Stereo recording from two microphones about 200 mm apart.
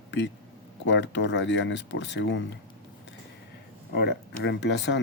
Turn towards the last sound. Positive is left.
turn(degrees=65)  # may be behind; listen again after turning